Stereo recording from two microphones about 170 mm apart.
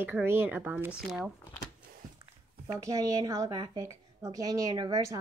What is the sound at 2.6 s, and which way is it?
A woman's voice, 20° right (ahead or behind).